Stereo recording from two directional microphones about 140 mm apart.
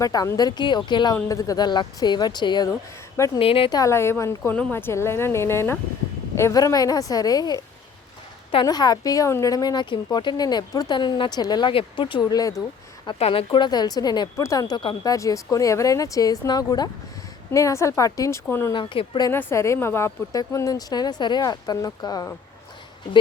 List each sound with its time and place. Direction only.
0.0 s a woman's voice: 25° left (ahead or behind); by 3.7 s 40° left (ahead or behind)
3.7 s a woman's voice: 25° left (ahead or behind)
8.6 s a woman's voice: 30° left (ahead or behind)
13.1 s a woman's voice: 45° left (ahead or behind); by 18.7 s 15° left (ahead or behind)
18.7 s speech: 35° left (ahead or behind)
19.3 s a woman's voice: 15° left (ahead or behind)